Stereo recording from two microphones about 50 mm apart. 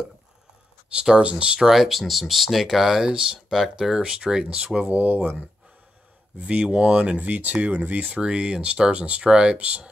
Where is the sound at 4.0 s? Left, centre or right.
Centre; by 5.3 s right.